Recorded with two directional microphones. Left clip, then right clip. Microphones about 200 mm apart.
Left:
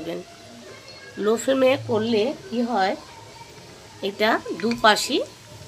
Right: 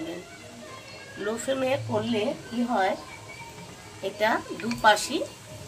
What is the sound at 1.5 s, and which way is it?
Speech, 60° left (ahead or behind).